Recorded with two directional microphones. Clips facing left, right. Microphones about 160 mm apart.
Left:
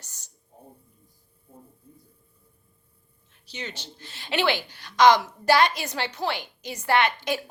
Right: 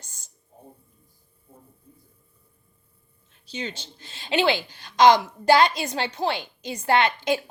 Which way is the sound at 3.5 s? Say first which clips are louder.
Right 4 dB; 25° right (ahead or behind).